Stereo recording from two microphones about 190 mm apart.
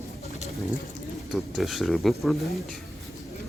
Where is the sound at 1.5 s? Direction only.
Centre (ahead or behind).